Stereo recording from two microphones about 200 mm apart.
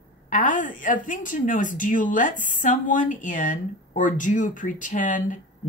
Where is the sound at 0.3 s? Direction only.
40° left (ahead or behind).